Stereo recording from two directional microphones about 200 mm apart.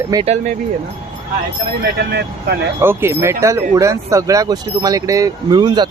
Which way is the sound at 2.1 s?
55° right (ahead or behind).